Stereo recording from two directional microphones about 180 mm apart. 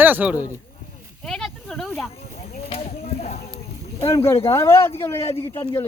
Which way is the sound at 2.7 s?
35° left (ahead or behind).